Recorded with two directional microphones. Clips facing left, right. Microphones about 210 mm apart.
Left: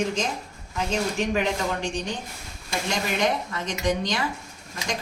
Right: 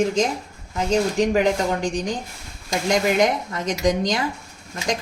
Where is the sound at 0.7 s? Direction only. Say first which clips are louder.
Right 6 dB; 40° right (ahead or behind).